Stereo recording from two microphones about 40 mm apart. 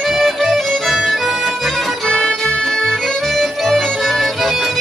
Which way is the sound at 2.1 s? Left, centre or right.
Centre.